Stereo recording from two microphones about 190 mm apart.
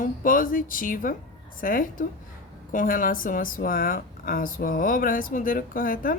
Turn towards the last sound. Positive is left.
turn(degrees=50)  # may be behind; listen again after turning